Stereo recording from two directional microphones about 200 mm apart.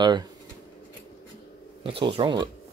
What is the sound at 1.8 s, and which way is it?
Speech, 25° right (ahead or behind).